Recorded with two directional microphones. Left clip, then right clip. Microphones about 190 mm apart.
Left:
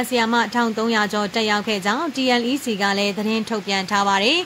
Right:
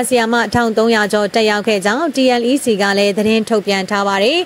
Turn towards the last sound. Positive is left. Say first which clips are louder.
# right 4 dB
turn(degrees=-30)  # may be behind; listen again after turning